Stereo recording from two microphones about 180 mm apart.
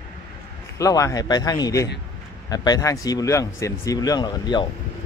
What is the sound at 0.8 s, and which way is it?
A man's voice, 20° left (ahead or behind).